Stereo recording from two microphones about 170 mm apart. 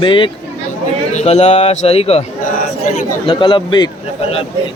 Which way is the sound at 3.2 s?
30° left (ahead or behind).